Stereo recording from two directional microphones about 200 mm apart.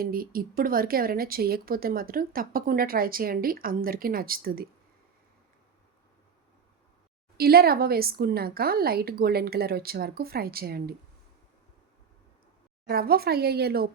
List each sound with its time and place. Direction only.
0.0 s a woman's voice: 45° right (ahead or behind)
7.3 s a woman's voice: 50° right (ahead or behind)
12.9 s a woman's voice: 50° right (ahead or behind)